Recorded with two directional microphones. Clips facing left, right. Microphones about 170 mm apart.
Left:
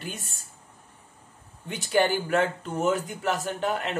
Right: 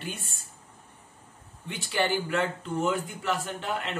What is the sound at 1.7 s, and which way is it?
Speech, 45° left (ahead or behind).